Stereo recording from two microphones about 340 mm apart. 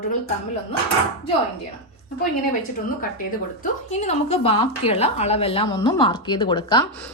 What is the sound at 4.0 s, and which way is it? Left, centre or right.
A woman's voice, centre.